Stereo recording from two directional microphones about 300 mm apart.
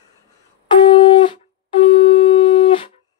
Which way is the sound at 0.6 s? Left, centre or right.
Centre.